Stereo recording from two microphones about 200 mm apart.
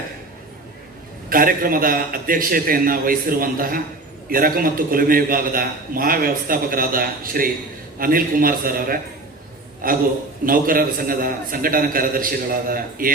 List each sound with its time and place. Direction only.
1.3 s a man's voice: 45° right (ahead or behind)